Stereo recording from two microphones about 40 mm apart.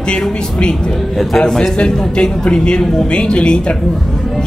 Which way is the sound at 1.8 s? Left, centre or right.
Left.